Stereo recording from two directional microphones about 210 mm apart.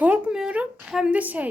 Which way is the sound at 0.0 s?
5° right (ahead or behind).